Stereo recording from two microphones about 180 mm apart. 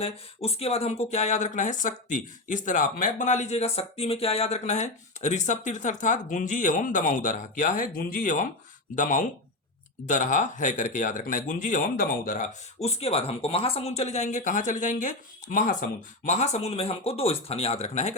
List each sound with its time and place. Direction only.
0.0 s speech: 35° left (ahead or behind)